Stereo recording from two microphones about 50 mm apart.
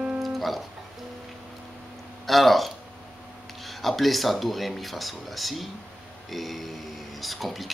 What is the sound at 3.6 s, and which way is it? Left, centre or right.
Speech, centre.